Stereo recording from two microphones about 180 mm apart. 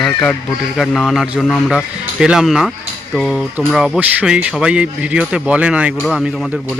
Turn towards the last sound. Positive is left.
turn(degrees=0)  # may be behind; listen again after turning